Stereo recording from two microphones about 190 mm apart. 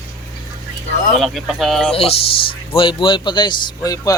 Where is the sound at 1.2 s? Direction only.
Centre (ahead or behind).